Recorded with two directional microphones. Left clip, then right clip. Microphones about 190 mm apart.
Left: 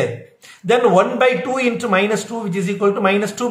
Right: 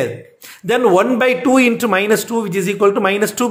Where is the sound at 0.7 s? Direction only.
50° right (ahead or behind).